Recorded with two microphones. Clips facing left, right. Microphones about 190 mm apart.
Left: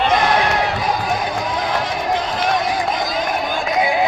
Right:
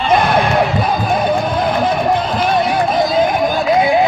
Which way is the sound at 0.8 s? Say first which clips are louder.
Right 4 dB; 60° right (ahead or behind).